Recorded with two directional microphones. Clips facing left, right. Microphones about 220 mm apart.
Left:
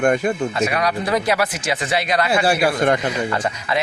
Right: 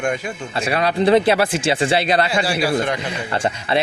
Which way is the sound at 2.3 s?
55° left (ahead or behind).